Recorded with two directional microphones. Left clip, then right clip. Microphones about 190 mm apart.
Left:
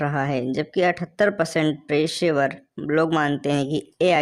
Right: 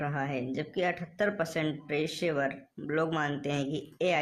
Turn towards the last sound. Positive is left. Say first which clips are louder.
# left 10 dB
turn(degrees=45)  # may be behind; listen again after turning